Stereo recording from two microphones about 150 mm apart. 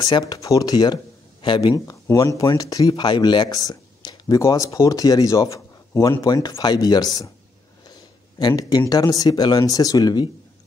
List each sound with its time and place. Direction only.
0.0 s speech: 25° left (ahead or behind)